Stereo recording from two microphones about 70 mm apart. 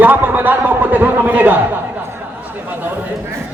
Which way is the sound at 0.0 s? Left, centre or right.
Right.